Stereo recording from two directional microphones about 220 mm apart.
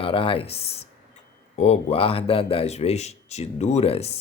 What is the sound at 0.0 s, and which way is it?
Speech, 25° left (ahead or behind).